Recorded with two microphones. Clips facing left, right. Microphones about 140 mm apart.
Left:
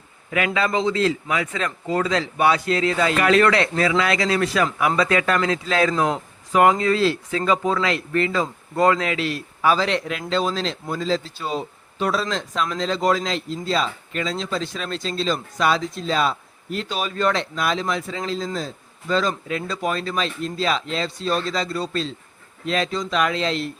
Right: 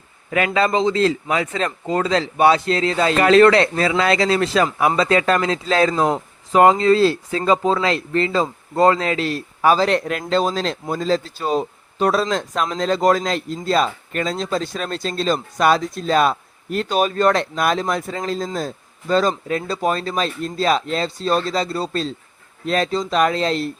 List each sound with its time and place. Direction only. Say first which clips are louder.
0.3 s speech: right 4 dB; 35° right (ahead or behind)
0.7 s a man's voice: right 3 dB; 25° right (ahead or behind)
0.9 s speech: right 3 dB; 35° right (ahead or behind)